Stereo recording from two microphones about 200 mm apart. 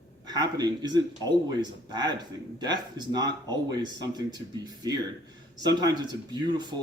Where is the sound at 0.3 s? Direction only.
20° right (ahead or behind).